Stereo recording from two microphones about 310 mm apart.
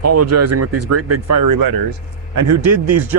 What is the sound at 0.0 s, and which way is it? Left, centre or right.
Speech, right.